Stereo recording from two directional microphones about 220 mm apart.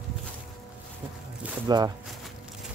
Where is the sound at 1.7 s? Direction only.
20° right (ahead or behind).